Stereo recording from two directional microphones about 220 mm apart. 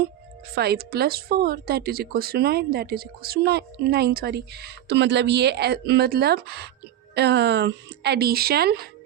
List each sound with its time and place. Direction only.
0.5 s speech: 45° right (ahead or behind)